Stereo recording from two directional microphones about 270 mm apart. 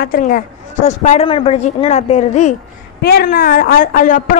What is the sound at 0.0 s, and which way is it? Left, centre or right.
A woman's voice, left.